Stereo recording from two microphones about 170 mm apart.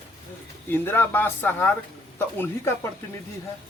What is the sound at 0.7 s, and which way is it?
Speech, 10° left (ahead or behind).